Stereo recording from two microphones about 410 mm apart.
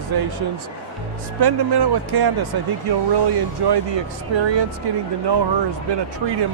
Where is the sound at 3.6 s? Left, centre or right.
Right.